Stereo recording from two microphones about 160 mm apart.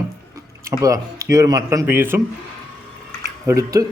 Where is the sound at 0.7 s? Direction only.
20° right (ahead or behind).